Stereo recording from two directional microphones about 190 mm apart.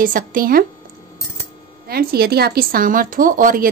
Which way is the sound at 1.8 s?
55° right (ahead or behind).